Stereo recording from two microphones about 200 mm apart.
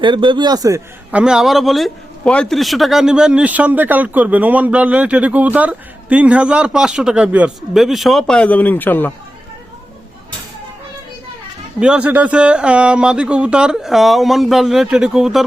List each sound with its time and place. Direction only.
0.0 s speech: 25° right (ahead or behind)
1.1 s a man's voice: 5° right (ahead or behind)
11.8 s a man's voice: 5° right (ahead or behind)